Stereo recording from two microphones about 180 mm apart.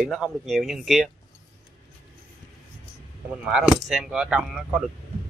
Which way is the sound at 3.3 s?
5° right (ahead or behind).